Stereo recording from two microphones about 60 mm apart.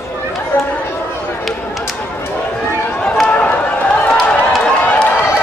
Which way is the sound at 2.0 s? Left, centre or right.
Left.